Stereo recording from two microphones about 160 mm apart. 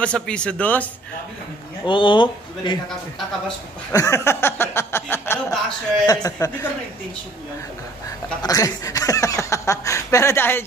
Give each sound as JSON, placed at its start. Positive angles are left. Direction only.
{"t": 0.0, "sound": "speech", "side_deg": 5}
{"t": 1.9, "sound": "speech", "side_deg": 30}
{"t": 3.9, "sound": "speech", "side_deg": 20}
{"t": 8.4, "sound": "speech", "side_deg": 20}